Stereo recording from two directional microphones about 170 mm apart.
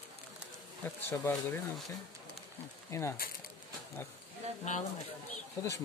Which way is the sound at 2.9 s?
15° left (ahead or behind).